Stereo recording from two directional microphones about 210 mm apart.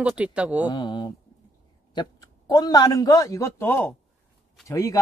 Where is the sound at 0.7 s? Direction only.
20° left (ahead or behind).